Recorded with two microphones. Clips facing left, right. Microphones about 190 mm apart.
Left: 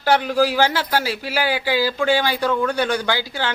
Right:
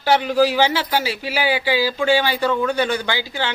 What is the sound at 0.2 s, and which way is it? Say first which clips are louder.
Speech: right 1 dB; 10° right (ahead or behind).